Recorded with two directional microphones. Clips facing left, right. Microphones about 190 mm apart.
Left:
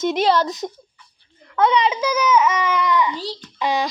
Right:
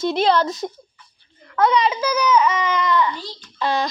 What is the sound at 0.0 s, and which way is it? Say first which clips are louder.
A woman's voice: even; 15° left (ahead or behind).